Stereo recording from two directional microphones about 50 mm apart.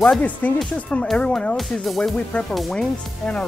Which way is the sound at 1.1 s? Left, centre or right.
Left.